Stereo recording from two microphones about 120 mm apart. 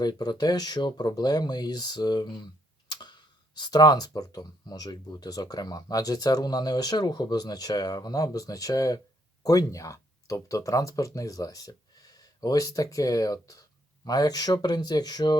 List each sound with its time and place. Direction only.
0.0 s speech: 35° left (ahead or behind)
2.9 s tick-tock: 40° left (ahead or behind)
3.6 s speech: 35° left (ahead or behind)